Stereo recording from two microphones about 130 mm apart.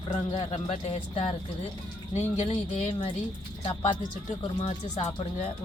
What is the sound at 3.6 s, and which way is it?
Speech, 45° left (ahead or behind).